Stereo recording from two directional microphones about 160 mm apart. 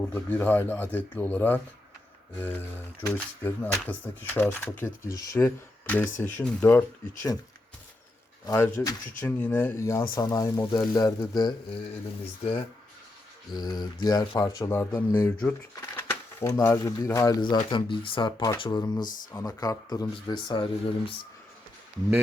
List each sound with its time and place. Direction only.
0.0 s speech: 10° left (ahead or behind)
8.4 s speech: 15° left (ahead or behind)
13.5 s speech: 25° left (ahead or behind); by 15.5 s 10° left (ahead or behind)
15.7 s pigeon: 15° left (ahead or behind)
16.6 s speech: 20° left (ahead or behind)
17.7 s speech: 30° left (ahead or behind)